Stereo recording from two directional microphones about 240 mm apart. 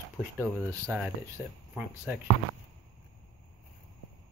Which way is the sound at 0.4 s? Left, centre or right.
Centre.